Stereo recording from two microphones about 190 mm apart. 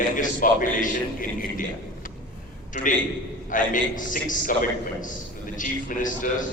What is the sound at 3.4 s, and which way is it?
A man's voice, 45° left (ahead or behind).